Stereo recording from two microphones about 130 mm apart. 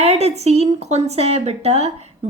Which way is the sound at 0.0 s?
55° right (ahead or behind).